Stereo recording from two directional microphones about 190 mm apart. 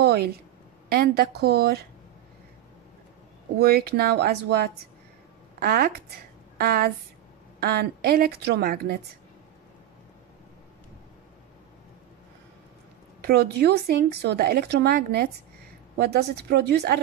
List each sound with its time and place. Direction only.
0.0 s a sound: 55° right (ahead or behind)
0.8 s speech: 55° right (ahead or behind)
3.5 s a woman's voice: 55° right (ahead or behind)
13.2 s speech: 55° right (ahead or behind)